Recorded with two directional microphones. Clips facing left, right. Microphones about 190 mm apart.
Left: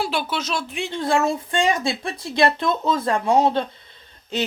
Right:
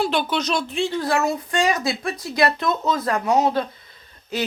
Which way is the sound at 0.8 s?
25° left (ahead or behind).